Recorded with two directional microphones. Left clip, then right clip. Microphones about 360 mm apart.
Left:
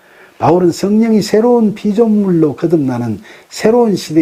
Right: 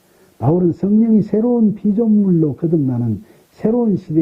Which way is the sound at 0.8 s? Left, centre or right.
Centre.